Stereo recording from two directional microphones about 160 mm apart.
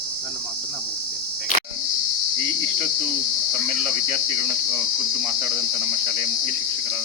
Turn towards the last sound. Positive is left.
turn(degrees=-30)  # may be behind; listen again after turning